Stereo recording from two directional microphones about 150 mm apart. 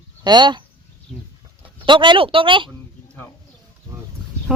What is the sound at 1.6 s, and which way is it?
Speech, 35° right (ahead or behind).